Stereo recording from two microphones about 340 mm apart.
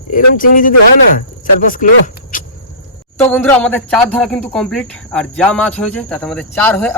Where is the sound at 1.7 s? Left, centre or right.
Left.